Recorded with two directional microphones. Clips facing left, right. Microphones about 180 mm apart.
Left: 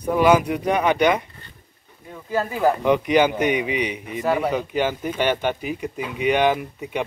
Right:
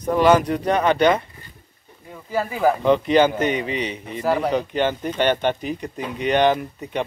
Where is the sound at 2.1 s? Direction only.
5° right (ahead or behind).